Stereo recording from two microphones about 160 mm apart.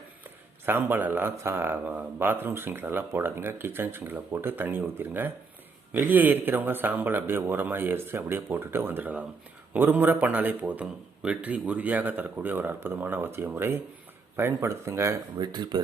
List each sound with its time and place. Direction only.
0.6 s speech: 15° right (ahead or behind)